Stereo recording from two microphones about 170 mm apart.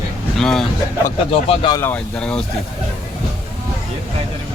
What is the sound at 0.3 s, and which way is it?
Speech, centre (ahead or behind).